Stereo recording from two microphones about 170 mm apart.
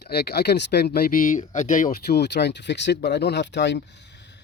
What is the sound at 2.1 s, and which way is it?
Speech, 80° left.